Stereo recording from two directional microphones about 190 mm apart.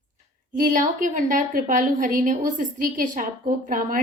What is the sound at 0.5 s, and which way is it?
A woman's voice, 45° right (ahead or behind).